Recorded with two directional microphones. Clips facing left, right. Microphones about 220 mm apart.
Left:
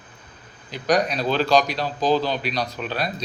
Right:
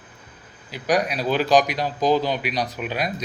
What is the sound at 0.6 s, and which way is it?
Speech, 10° right (ahead or behind).